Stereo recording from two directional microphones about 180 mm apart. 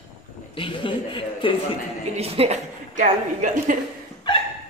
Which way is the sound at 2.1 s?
35° right (ahead or behind).